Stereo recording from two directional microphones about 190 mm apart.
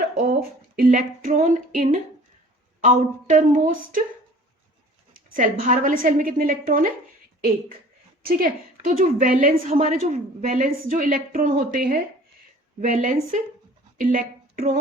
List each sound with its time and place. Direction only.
0.1 s speech: 50° right (ahead or behind)
5.1 s a woman's voice: 45° right (ahead or behind)
8.2 s a woman's voice: 50° right (ahead or behind)